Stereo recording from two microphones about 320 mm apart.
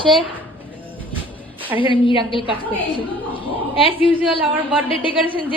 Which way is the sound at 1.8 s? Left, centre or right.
Centre.